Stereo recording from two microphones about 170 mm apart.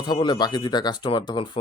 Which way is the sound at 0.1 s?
25° left (ahead or behind).